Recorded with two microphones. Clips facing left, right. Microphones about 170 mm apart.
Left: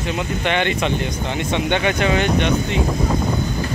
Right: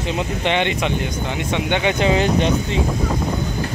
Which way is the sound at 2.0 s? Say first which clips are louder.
Right 1 dB; 30° right (ahead or behind).